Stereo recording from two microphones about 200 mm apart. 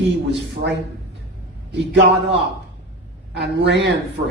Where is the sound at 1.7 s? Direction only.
60° right (ahead or behind).